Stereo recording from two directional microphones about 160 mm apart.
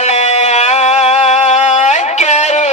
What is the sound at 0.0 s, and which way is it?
Music, 45° left (ahead or behind).